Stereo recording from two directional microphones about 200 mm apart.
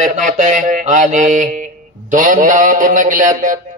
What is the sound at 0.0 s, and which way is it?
Mantra, 40° right (ahead or behind).